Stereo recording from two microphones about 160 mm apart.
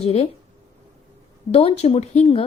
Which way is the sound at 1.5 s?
40° left (ahead or behind).